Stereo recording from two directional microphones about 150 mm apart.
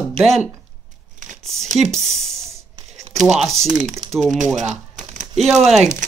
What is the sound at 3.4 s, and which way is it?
Speech, centre (ahead or behind).